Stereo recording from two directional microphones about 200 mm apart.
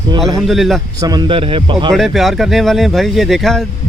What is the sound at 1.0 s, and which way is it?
Speech, 20° right (ahead or behind).